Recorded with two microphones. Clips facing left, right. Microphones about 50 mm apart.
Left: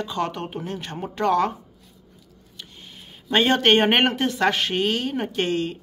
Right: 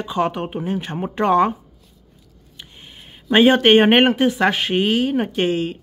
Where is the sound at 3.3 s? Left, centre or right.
Centre.